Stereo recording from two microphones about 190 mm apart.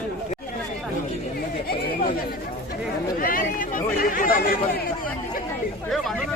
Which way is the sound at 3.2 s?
45° left (ahead or behind).